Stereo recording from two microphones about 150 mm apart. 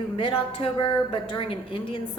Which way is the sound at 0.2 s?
35° left (ahead or behind).